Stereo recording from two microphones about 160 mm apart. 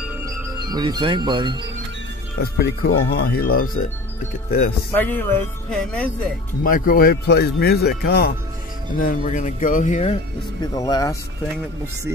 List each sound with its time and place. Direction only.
0.2 s speech: 25° right (ahead or behind)
2.4 s speech: 75° left (ahead or behind)
4.9 s speech: 10° left (ahead or behind)
6.6 s speech: 60° left (ahead or behind); by 8.3 s 80° left
9.0 s speech: 50° left (ahead or behind)
10.6 s speech: 25° left (ahead or behind)